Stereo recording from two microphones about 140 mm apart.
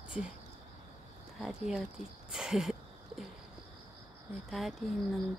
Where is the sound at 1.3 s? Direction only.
Centre (ahead or behind).